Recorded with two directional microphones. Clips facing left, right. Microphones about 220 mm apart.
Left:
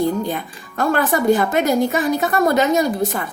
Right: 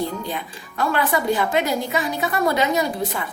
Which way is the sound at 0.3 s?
45° left (ahead or behind).